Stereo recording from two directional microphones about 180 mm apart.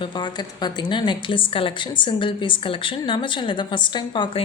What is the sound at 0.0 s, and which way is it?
A woman's voice, 25° left (ahead or behind).